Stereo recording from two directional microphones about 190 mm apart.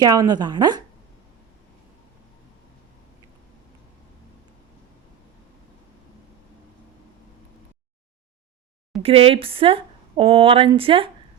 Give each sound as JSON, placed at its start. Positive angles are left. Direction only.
{"t": 0.0, "sound": "speech", "side_deg": -20}
{"t": 9.0, "sound": "speech", "side_deg": -30}